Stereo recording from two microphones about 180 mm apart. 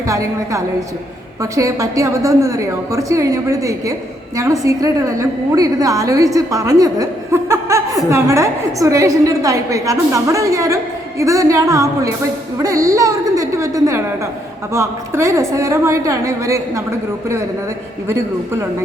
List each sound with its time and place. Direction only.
0.1 s a woman's voice: 15° right (ahead or behind)